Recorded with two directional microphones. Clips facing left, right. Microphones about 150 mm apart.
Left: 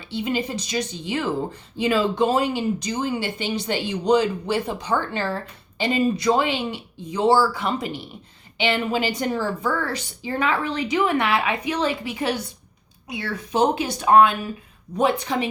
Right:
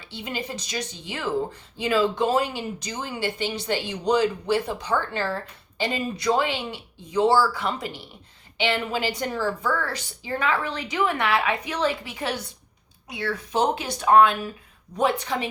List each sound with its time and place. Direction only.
0.1 s a woman's voice: 15° left (ahead or behind)